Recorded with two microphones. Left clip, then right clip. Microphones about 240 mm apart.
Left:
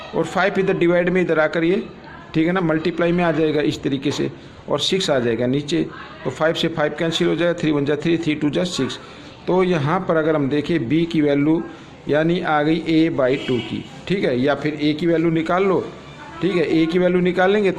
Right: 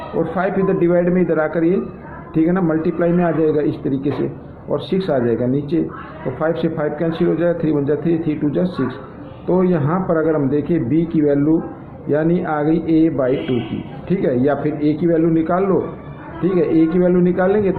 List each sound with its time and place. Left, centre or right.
0.2 s a man's voice: left